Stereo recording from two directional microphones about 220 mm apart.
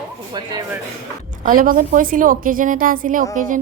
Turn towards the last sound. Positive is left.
turn(degrees=-35)  # may be behind; listen again after turning